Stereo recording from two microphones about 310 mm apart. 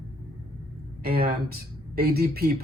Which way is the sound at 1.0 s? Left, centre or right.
Right.